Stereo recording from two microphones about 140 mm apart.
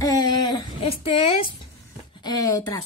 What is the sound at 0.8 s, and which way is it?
Speech, 45° left (ahead or behind).